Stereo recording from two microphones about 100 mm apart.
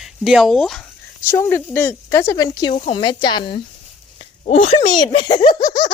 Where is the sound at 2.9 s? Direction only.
50° left (ahead or behind).